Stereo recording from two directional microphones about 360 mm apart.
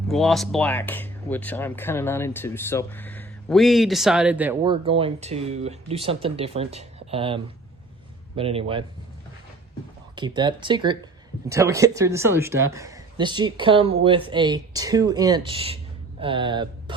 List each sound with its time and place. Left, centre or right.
0.1 s speech: centre
10.2 s speech: centre